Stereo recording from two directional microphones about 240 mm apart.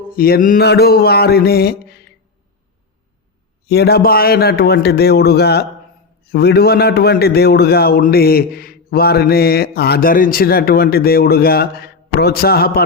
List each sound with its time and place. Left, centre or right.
0.1 s a man's voice: left
3.7 s a man's voice: left